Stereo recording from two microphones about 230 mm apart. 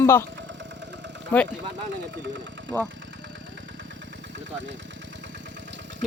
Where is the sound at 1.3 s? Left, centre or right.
Centre.